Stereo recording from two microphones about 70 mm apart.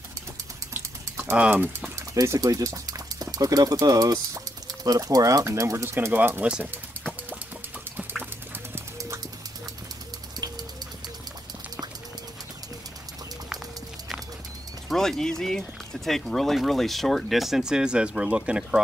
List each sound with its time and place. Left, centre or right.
1.3 s speech: centre
2.4 s speech: right
6.1 s speech: right
6.4 s speech: centre
8.0 s a sound: right
14.9 s speech: centre